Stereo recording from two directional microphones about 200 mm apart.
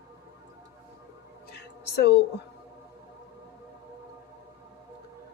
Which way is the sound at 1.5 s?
55° left (ahead or behind).